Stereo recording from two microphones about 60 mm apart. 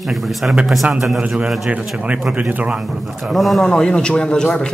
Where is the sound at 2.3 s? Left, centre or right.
Centre.